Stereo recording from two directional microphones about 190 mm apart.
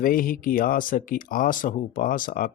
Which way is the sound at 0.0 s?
50° left (ahead or behind).